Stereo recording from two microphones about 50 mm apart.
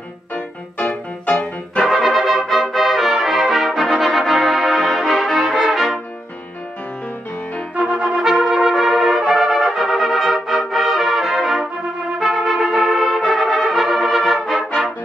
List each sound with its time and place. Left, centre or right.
0.7 s music: left
1.9 s brass instrument: centre
7.7 s trumpet: centre
12.2 s music: centre
14.5 s brass instrument: centre